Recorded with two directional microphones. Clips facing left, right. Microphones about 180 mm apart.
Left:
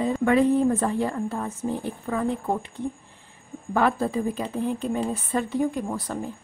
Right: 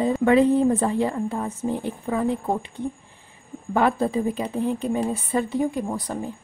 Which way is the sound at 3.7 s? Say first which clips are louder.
Right 2 dB; 20° right (ahead or behind).